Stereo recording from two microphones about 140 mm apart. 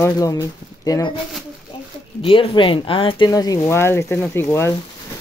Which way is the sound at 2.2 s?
40° left (ahead or behind).